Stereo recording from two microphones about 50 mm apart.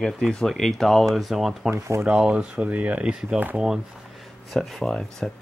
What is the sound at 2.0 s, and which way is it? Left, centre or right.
Speech, right.